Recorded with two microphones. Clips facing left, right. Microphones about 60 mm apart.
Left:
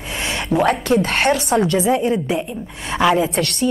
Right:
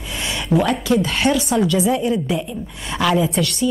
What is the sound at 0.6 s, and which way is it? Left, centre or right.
A woman's voice, left.